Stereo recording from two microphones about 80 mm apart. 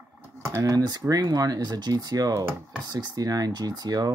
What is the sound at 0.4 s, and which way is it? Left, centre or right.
Speech, right.